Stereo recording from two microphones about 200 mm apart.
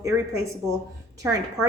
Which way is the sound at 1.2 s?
15° right (ahead or behind).